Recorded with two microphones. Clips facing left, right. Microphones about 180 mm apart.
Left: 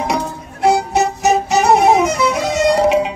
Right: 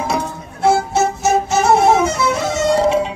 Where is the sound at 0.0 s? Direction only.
15° left (ahead or behind).